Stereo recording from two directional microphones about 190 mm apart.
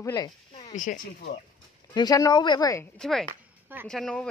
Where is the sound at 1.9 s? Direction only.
20° left (ahead or behind).